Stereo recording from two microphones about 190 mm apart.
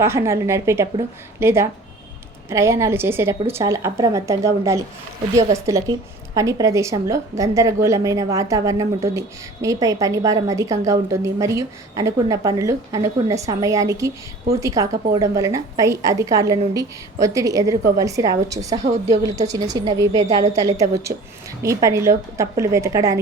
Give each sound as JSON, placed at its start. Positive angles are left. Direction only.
{"t": 0.0, "sound": "a woman's voice", "side_deg": -15}